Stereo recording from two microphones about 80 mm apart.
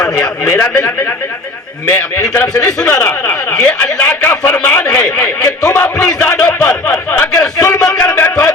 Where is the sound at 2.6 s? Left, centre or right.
Centre.